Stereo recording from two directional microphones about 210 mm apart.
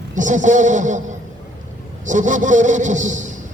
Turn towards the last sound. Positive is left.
turn(degrees=-35)  # may be behind; listen again after turning